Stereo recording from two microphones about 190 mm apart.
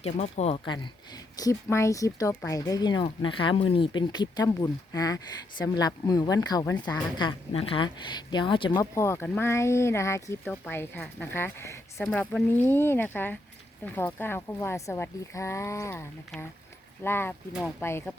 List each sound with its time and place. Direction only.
0.0 s speech: 35° left (ahead or behind)
1.4 s speech: 15° left (ahead or behind)